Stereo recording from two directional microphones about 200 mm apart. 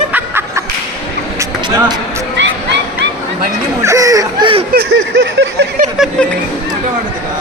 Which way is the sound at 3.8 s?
15° right (ahead or behind).